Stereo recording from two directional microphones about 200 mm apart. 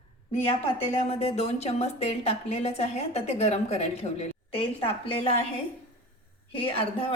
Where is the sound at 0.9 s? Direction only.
30° left (ahead or behind).